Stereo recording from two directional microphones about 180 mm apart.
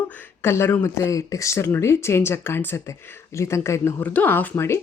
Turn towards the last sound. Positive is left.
turn(degrees=15)  # may be behind; listen again after turning